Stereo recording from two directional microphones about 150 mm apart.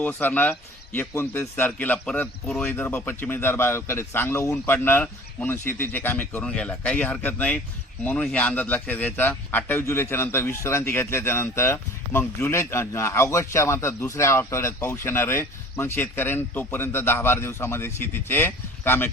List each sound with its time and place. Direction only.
0.0 s a man's voice: 15° left (ahead or behind)